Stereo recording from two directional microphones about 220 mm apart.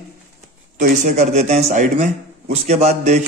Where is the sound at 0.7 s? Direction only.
35° right (ahead or behind).